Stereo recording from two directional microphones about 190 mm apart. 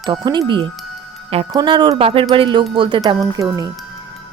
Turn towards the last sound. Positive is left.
turn(degrees=-20)  # may be behind; listen again after turning